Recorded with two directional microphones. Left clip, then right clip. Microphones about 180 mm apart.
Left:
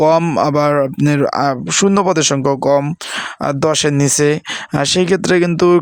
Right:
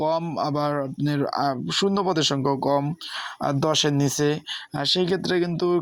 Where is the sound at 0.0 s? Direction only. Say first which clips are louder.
Left 12 dB; 65° left (ahead or behind).